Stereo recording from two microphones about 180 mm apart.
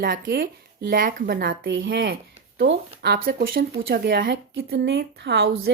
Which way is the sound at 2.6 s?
70° right (ahead or behind).